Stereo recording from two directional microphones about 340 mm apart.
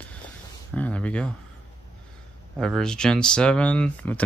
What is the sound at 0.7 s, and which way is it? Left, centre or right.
Speech, centre.